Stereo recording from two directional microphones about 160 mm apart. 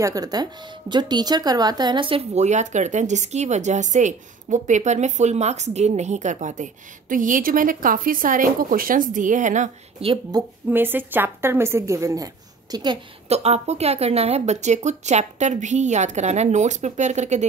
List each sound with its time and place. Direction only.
0.0 s speech: 20° right (ahead or behind); by 10.0 s 50° right (ahead or behind)
10.3 s a woman's voice: 25° right (ahead or behind)
10.7 s a woman's voice: 10° right (ahead or behind); by 13.0 s 30° right (ahead or behind)
13.3 s speech: 40° right (ahead or behind)